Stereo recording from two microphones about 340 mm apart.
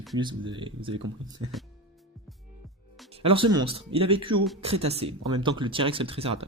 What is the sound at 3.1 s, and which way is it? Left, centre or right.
Speech, centre.